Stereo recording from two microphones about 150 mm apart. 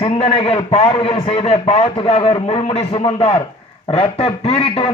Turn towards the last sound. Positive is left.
turn(degrees=40)  # may be behind; listen again after turning